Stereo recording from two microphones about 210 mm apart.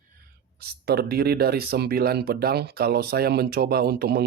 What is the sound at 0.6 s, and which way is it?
Speech, 50° right (ahead or behind).